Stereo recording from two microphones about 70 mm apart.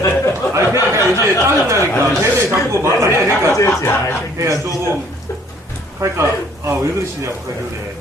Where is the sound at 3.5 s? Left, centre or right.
Left.